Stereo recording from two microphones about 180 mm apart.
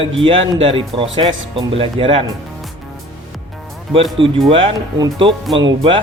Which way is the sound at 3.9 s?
30° right (ahead or behind).